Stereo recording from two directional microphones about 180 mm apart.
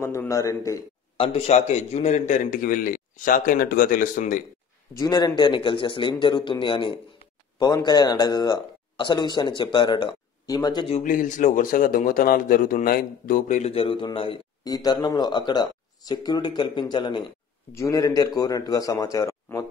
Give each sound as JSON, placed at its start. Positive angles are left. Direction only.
{"t": 0.0, "sound": "a man's voice", "side_deg": 15}
{"t": 1.1, "sound": "a man's voice", "side_deg": 30}
{"t": 4.9, "sound": "speech", "side_deg": 20}
{"t": 11.0, "sound": "speech", "side_deg": 45}